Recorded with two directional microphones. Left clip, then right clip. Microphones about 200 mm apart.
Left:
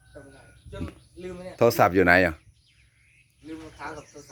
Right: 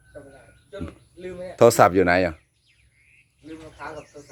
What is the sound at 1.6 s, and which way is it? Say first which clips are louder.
Speech: right 5 dB; 15° right (ahead or behind).